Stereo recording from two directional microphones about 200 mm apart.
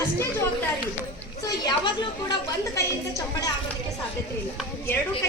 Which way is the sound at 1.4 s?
20° left (ahead or behind).